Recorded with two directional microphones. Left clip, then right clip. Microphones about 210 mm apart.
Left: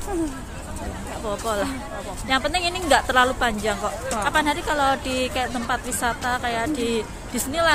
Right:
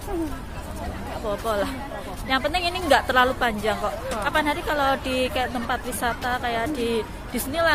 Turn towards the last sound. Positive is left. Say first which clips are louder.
# left 1 dB
turn(degrees=5)  # may be behind; listen again after turning